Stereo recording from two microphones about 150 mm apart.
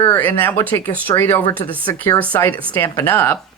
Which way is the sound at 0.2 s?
10° left (ahead or behind).